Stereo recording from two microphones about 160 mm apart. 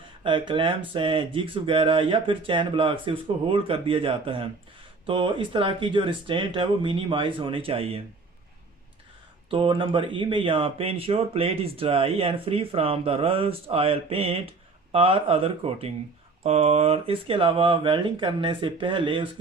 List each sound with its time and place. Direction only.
0.3 s speech: 30° right (ahead or behind)
9.5 s speech: 30° right (ahead or behind)